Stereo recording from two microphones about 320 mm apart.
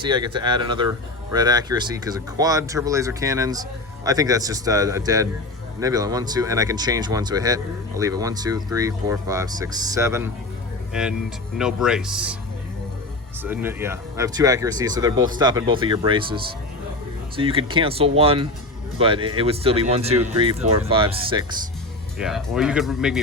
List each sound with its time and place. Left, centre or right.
0.0 s speech: centre
13.4 s speech: centre
22.2 s speech: centre